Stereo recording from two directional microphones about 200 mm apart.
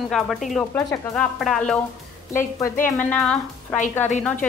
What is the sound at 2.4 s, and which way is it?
A woman's voice, 15° left (ahead or behind).